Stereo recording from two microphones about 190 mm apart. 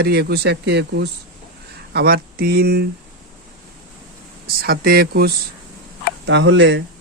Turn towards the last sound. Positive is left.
turn(degrees=-70)  # may be behind; listen again after turning